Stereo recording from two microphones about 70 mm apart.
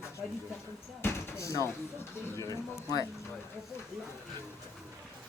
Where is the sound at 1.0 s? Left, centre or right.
Left.